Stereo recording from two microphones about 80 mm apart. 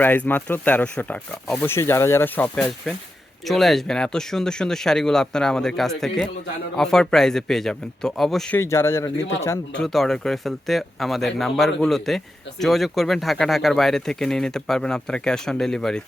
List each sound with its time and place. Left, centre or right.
0.0 s speech: left
1.6 s speech: left
2.6 s speech: centre
8.5 s speech: left
9.7 s speech: centre